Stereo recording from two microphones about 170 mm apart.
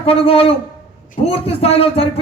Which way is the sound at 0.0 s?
35° left (ahead or behind).